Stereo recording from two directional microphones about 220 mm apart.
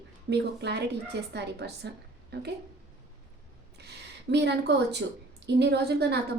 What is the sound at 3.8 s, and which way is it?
A woman's voice, 50° right (ahead or behind).